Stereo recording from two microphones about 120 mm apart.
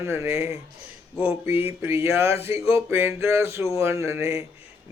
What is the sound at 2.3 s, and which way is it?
Speech, 55° left (ahead or behind).